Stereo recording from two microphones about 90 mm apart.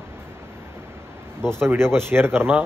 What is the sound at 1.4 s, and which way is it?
A man's voice, 30° right (ahead or behind).